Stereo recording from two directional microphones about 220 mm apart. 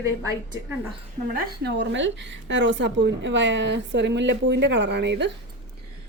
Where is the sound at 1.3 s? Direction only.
45° right (ahead or behind).